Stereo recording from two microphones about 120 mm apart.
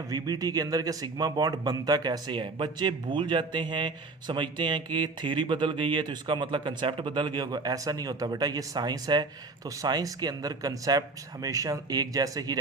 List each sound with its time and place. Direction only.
0.1 s speech: 30° right (ahead or behind)